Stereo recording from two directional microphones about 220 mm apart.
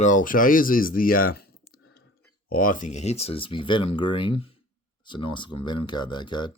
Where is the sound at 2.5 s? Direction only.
40° left (ahead or behind); by 6.5 s 20° left (ahead or behind).